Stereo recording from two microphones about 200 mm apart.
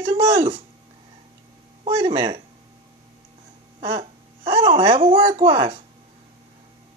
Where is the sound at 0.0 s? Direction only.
20° right (ahead or behind).